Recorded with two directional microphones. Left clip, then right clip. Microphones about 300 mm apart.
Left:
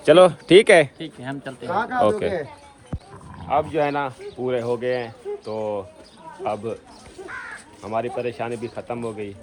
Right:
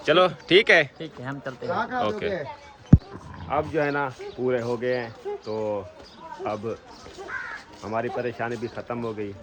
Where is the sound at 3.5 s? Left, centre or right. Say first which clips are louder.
Left 4 dB; centre.